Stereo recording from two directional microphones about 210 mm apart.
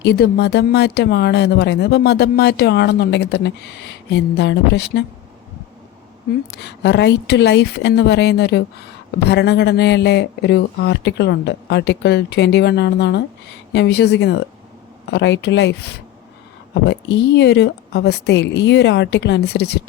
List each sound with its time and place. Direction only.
0.0 s speech: 50° left (ahead or behind)
6.6 s a woman's voice: 55° left (ahead or behind)